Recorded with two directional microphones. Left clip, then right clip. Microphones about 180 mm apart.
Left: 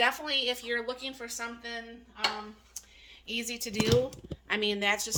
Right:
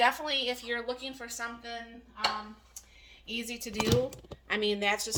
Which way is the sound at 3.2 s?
60° left (ahead or behind).